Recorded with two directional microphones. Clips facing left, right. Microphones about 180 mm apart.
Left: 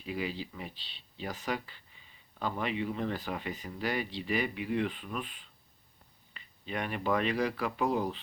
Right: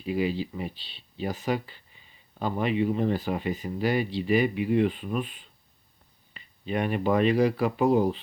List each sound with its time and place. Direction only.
0.0 s speech: 20° right (ahead or behind)
2.4 s speech: 15° right (ahead or behind)
6.3 s a sound: 20° right (ahead or behind)
7.3 s speech: 30° right (ahead or behind)